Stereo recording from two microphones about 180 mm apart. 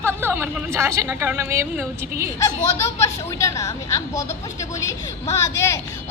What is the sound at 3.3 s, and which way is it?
A woman's voice, 20° left (ahead or behind).